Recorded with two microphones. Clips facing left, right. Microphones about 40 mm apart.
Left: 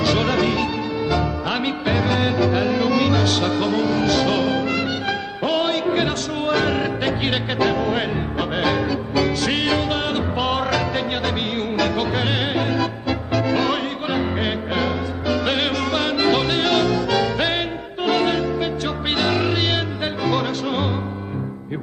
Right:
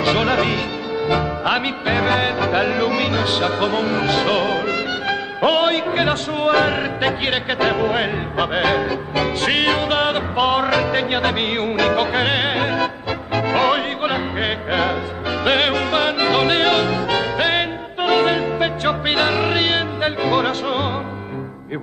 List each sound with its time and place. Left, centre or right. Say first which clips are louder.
0.0 s music: right 1 dB; right
3.4 s music: right 1 dB; right
7.9 s music: right 2 dB; centre
16.1 s yodeling: right 1 dB; centre
16.4 s music: right 2 dB; right
19.6 s music: right 3 dB; right